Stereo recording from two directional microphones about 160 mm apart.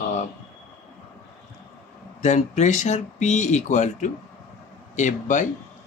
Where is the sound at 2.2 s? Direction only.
45° left (ahead or behind).